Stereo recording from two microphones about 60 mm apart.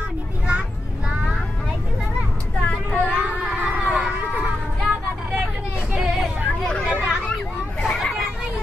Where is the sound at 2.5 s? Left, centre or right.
Left.